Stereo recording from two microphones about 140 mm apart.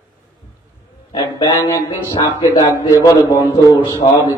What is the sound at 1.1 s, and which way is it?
A man's voice, 25° left (ahead or behind).